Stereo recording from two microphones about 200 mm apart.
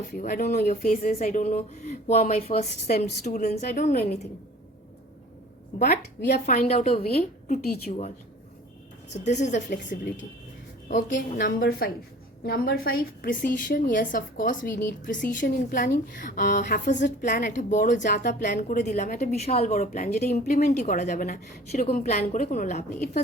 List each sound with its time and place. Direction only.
0.1 s speech: 45° left (ahead or behind)
5.8 s speech: 45° left (ahead or behind)
9.1 s a woman's voice: 35° left (ahead or behind)
20.4 s speech: 45° left (ahead or behind)